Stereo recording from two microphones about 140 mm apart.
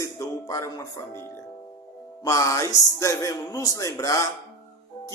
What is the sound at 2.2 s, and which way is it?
Music, 25° left (ahead or behind).